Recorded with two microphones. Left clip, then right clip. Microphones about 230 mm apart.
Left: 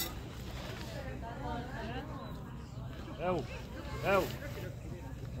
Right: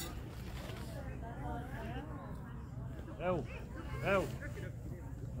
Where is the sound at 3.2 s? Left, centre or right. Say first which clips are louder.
Left 2 dB; right.